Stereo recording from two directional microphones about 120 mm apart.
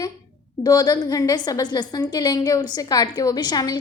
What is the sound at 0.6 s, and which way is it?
A woman's voice, 30° left (ahead or behind).